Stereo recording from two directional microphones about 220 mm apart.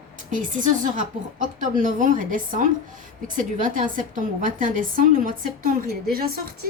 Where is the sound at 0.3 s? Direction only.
35° right (ahead or behind).